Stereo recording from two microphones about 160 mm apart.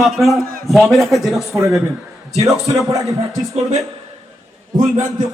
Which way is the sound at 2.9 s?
20° right (ahead or behind).